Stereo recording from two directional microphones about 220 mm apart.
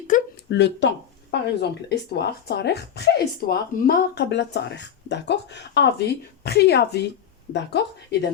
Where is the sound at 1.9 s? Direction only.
50° left (ahead or behind).